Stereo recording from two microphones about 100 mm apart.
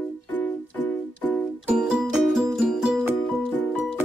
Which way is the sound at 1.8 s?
5° right (ahead or behind).